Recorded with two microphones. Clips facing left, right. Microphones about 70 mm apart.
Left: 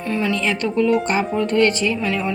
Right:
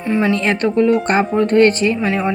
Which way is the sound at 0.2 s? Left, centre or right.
Right.